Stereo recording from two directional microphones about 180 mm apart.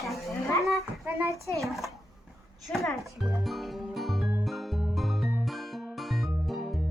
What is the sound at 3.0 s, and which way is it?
Music, centre (ahead or behind).